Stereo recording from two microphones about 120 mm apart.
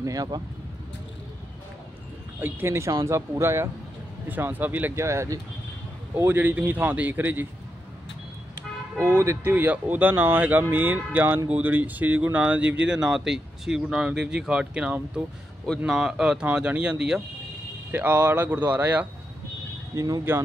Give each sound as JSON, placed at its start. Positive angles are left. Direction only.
{"t": 0.0, "sound": "speech", "side_deg": -30}
{"t": 2.4, "sound": "speech", "side_deg": -20}
{"t": 8.9, "sound": "speech", "side_deg": -25}
{"t": 20.0, "sound": "speech", "side_deg": -25}